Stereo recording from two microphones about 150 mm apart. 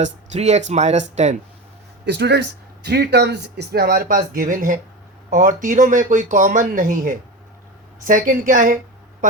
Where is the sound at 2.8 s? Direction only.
90° right; by 8.8 s 65° right (ahead or behind).